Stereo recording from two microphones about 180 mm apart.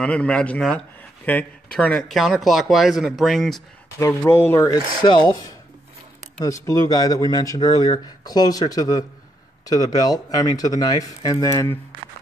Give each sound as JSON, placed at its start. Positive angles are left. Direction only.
{"t": 0.0, "sound": "speech", "side_deg": 5}
{"t": 4.0, "sound": "speech", "side_deg": 15}
{"t": 6.4, "sound": "speech", "side_deg": 15}